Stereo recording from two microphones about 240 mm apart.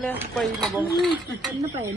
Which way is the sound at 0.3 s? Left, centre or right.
Centre.